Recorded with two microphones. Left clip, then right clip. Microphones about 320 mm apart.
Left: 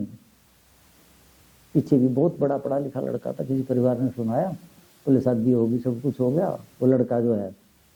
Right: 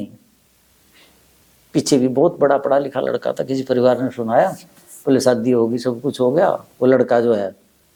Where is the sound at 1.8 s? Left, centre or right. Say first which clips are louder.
Right 5 dB; centre.